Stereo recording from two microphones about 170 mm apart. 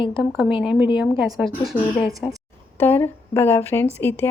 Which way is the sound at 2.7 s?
10° left (ahead or behind).